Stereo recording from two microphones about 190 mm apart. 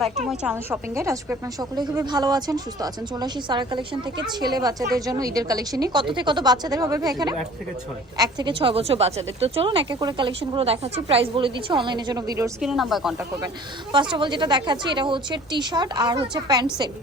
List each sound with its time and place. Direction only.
0.3 s a woman's voice: 10° right (ahead or behind)
12.5 s speech: centre (ahead or behind)
13.9 s a woman's voice: 25° right (ahead or behind)